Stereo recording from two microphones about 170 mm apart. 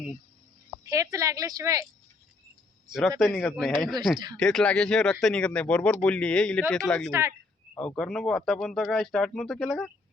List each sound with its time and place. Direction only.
0.9 s a woman's voice: 20° right (ahead or behind)
2.9 s speech: centre (ahead or behind)
7.1 s speech: 15° right (ahead or behind)
7.8 s speech: 5° left (ahead or behind)